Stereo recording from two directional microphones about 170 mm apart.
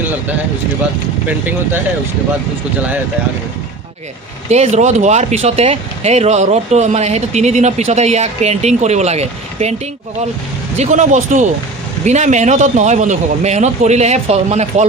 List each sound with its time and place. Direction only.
4.4 s speech: 40° right (ahead or behind)
10.8 s a man's voice: 45° right (ahead or behind)